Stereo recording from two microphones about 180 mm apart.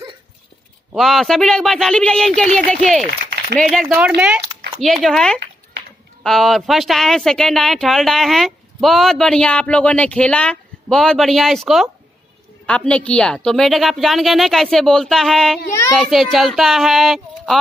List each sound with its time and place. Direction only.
0.9 s speech: centre (ahead or behind)
4.5 s a sound: 25° right (ahead or behind)
4.8 s speech: centre (ahead or behind)